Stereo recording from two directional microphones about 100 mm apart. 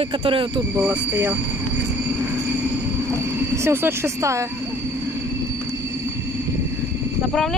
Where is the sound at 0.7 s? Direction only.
20° right (ahead or behind).